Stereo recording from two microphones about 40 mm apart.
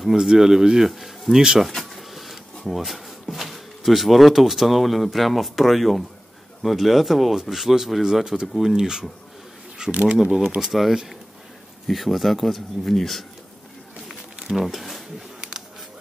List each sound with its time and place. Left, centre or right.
0.0 s speech: centre
1.8 s a sound: centre
2.7 s speech: centre
9.8 s speech: right
10.7 s speech: centre
14.6 s speech: centre